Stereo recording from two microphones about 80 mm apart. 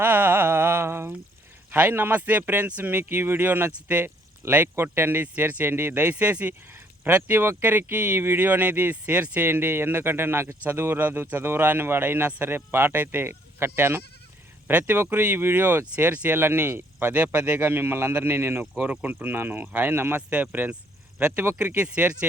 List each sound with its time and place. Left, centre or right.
0.0 s music: right
1.7 s speech: right